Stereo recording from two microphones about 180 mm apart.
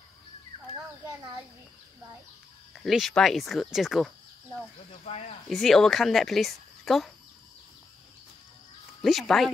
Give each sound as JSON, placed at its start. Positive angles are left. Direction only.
{"t": 2.7, "sound": "speech", "side_deg": 0}
{"t": 5.1, "sound": "speech", "side_deg": 35}
{"t": 5.5, "sound": "speech", "side_deg": 0}
{"t": 9.0, "sound": "speech", "side_deg": 0}